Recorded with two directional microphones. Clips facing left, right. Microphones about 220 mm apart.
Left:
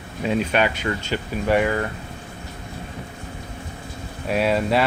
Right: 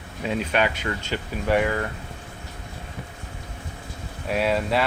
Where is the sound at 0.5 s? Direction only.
25° left (ahead or behind).